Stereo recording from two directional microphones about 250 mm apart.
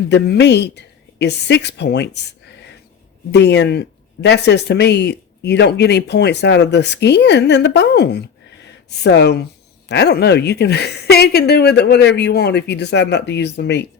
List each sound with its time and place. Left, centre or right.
0.1 s speech: left
3.3 s a woman's voice: left